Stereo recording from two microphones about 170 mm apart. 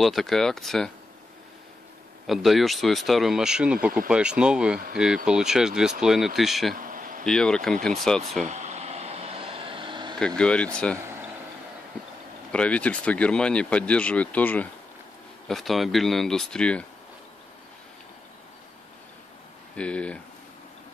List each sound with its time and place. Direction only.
0.0 s speech: centre (ahead or behind)
2.2 s speech: centre (ahead or behind)
6.7 s insect: 55° right (ahead or behind)
7.2 s speech: 5° left (ahead or behind)
8.5 s vehicle: 40° right (ahead or behind)
10.1 s speech: 5° left (ahead or behind)
12.5 s speech: 5° left (ahead or behind)
19.7 s speech: 5° left (ahead or behind)